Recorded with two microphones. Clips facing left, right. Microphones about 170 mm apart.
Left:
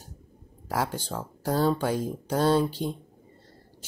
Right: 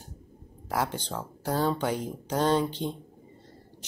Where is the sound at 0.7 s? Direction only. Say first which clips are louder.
Left 1 dB; 10° left (ahead or behind).